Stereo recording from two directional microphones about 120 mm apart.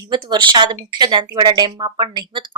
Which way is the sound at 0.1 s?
40° right (ahead or behind).